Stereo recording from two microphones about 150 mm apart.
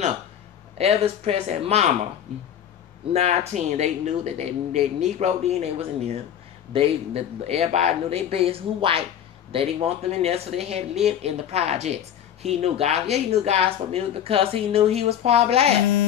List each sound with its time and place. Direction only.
0.7 s speech: 45° right (ahead or behind)
3.1 s speech: 45° right (ahead or behind)